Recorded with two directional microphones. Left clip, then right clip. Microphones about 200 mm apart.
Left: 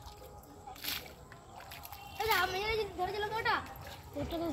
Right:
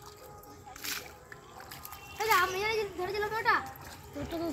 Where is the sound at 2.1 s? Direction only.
55° left (ahead or behind).